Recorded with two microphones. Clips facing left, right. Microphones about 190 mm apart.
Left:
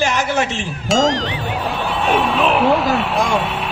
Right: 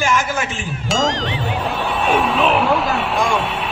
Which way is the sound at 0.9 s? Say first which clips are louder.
Left 4 dB; centre (ahead or behind).